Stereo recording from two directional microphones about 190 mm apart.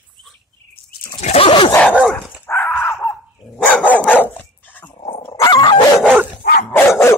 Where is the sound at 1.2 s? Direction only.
30° left (ahead or behind).